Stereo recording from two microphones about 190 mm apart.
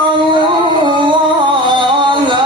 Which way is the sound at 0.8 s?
25° right (ahead or behind).